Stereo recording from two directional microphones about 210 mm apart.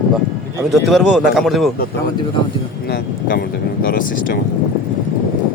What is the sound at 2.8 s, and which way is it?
Speech, 50° left (ahead or behind).